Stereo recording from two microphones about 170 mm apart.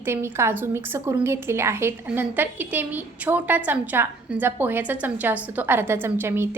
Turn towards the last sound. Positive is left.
turn(degrees=-15)  # may be behind; listen again after turning